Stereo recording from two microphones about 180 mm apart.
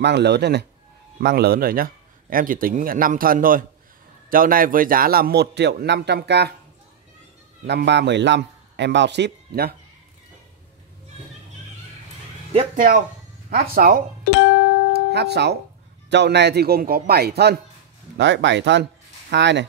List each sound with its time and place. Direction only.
0.0 s a man's voice: 70° right (ahead or behind)
7.6 s a man's voice: 70° right (ahead or behind)
12.7 s a man's voice: 45° right (ahead or behind)
13.5 s a man's voice: 55° right (ahead or behind)
15.1 s a man's voice: 65° right (ahead or behind)
18.1 s speech: 75° right (ahead or behind)